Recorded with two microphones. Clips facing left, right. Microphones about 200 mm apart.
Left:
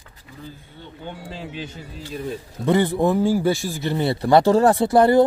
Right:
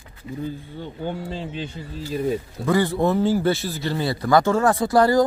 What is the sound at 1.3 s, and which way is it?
Speech, 5° left (ahead or behind).